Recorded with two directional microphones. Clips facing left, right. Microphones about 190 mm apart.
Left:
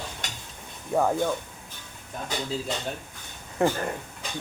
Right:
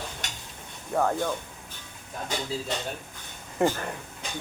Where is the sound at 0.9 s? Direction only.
15° left (ahead or behind).